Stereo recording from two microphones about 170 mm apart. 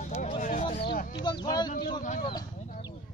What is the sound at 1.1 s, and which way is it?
Speech, 25° left (ahead or behind).